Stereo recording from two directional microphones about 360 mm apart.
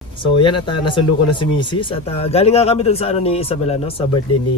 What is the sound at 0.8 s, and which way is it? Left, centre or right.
Speech, centre.